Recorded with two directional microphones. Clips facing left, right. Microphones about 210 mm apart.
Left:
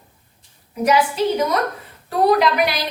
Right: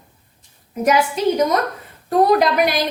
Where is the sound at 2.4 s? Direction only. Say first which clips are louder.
Right 1 dB; 45° right (ahead or behind).